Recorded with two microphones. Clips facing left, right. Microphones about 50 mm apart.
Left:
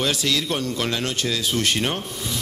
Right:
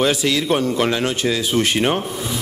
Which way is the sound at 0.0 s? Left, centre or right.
Centre.